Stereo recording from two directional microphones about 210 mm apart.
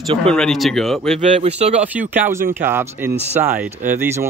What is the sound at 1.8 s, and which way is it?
Speech, 5° right (ahead or behind).